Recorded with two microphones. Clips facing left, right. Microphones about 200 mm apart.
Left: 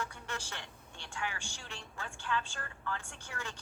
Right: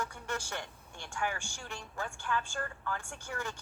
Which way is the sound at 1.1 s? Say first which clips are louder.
Right 4 dB; 45° right (ahead or behind).